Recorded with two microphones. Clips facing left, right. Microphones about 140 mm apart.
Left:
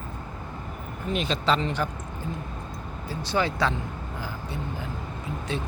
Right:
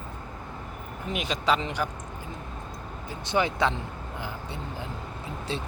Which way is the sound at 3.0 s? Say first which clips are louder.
Even; 20° right (ahead or behind).